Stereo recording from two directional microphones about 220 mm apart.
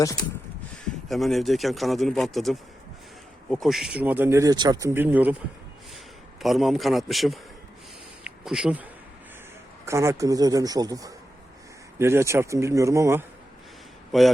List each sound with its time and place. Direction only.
1.0 s speech: centre (ahead or behind)
6.4 s speech: centre (ahead or behind)
8.2 s a sound: 5° right (ahead or behind)
9.8 s speech: 10° right (ahead or behind)
14.1 s speech: centre (ahead or behind)